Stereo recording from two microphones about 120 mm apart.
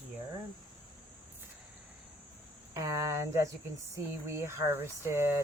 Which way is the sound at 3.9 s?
20° right (ahead or behind).